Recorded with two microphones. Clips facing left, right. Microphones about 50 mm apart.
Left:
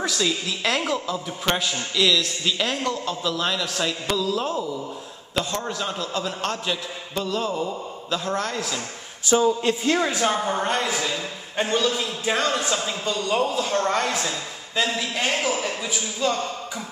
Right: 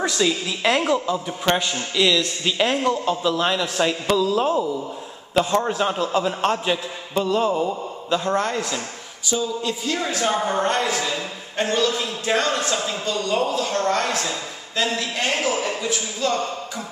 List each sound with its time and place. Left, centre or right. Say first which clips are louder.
0.0 s a man's voice: right 3 dB; centre
5.3 s a man's voice: right 7 dB; centre
9.3 s speech: left 5 dB; left
9.9 s a man's voice: left 1 dB; centre
10.3 s a woman's voice: right 2 dB; centre